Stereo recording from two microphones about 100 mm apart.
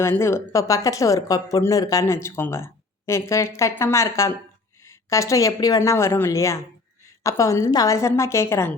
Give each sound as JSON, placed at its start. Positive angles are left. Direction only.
{"t": 0.0, "sound": "a woman's voice", "side_deg": 25}